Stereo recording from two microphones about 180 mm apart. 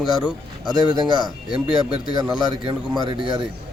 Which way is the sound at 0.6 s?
25° right (ahead or behind).